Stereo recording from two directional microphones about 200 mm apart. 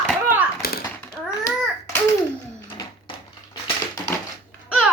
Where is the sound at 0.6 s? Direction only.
50° left (ahead or behind).